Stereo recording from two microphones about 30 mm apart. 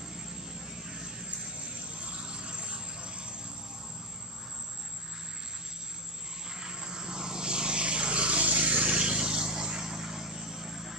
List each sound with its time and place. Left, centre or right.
0.1 s vehicle: right
1.2 s vehicle: right
6.5 s vehicle: right
8.9 s vehicle: right; by 11.0 s centre